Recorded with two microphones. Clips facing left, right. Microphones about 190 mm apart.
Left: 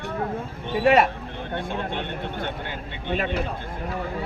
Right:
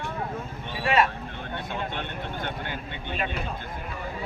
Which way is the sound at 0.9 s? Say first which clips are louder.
Left 5 dB; 65° left (ahead or behind).